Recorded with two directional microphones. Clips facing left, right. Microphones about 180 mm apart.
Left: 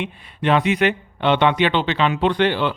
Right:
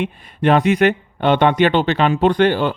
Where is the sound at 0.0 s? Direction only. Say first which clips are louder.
Right 5 dB; 45° right (ahead or behind).